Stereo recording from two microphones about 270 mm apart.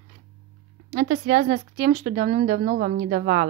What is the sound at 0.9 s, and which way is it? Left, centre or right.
A woman's voice, right.